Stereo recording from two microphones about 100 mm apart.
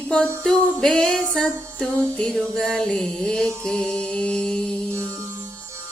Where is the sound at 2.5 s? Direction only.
5° left (ahead or behind).